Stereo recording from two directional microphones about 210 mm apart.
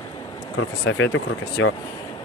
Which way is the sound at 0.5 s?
70° left (ahead or behind).